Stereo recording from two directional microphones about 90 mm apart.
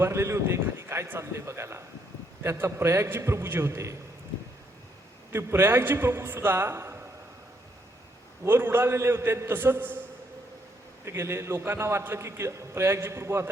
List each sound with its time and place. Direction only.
0.0 s a man's voice: 30° right (ahead or behind)
5.3 s a man's voice: 25° right (ahead or behind)
8.4 s a man's voice: 25° right (ahead or behind)
11.0 s a man's voice: 30° right (ahead or behind)